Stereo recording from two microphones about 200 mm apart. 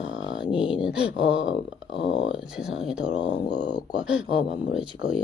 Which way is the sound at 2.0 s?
70° left (ahead or behind).